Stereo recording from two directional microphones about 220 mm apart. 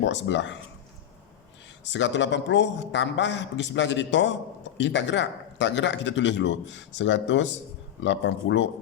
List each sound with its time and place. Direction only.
0.0 s speech: 55° left (ahead or behind)
1.8 s a man's voice: 55° left (ahead or behind)